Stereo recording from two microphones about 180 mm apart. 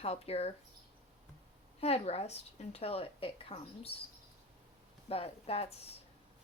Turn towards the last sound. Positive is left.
turn(degrees=35)  # may be behind; listen again after turning